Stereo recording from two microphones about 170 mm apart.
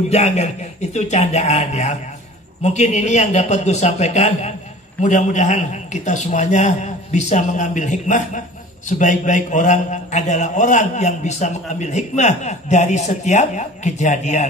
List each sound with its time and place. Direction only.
0.1 s a man's voice: 40° left (ahead or behind)